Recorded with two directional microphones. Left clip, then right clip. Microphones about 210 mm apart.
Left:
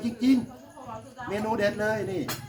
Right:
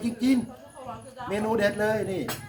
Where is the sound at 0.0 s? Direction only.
15° right (ahead or behind).